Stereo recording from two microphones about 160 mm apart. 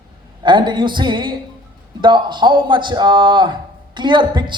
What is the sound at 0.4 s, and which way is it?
A man's voice, 30° right (ahead or behind).